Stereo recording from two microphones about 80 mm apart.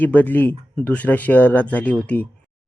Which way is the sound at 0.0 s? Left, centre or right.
Left.